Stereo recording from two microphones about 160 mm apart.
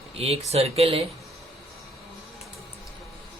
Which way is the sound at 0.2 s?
40° right (ahead or behind).